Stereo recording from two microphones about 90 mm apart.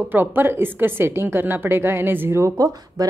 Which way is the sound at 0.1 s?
20° right (ahead or behind).